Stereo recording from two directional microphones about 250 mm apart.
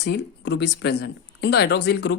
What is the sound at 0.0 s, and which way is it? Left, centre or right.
Speech, left.